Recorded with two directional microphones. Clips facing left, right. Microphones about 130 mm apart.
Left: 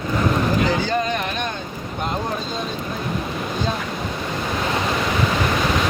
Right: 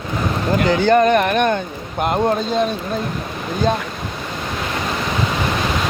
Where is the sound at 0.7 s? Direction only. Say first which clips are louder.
Right 8 dB; 60° right (ahead or behind).